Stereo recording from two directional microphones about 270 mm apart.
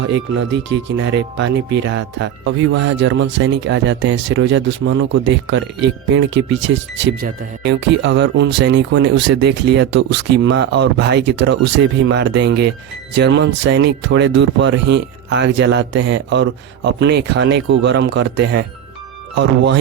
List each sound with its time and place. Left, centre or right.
0.1 s speech: right